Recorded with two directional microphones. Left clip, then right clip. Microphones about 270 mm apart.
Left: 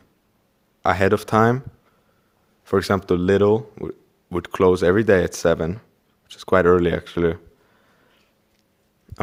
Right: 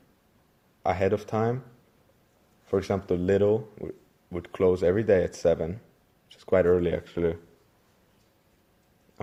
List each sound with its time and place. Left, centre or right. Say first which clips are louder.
0.8 s speech: left 7 dB; left
2.6 s speech: left 7 dB; left